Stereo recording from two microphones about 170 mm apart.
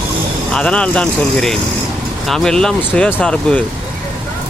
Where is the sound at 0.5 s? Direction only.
5° left (ahead or behind).